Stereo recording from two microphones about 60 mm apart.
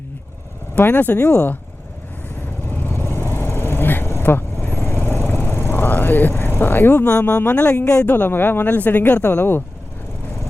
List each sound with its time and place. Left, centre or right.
0.8 s speech: left
2.6 s vehicle: left
7.1 s speech: left